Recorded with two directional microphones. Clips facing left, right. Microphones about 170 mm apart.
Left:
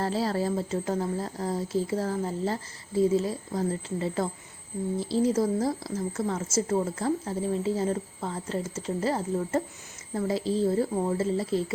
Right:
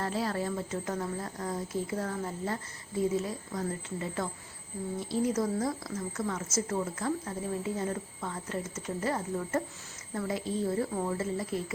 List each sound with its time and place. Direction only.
0.0 s speech: 35° left (ahead or behind)